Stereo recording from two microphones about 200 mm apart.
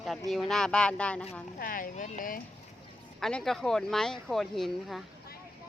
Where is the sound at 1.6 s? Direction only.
45° left (ahead or behind).